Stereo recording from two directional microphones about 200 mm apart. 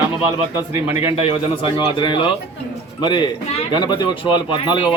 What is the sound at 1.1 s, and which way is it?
Speech, 25° left (ahead or behind).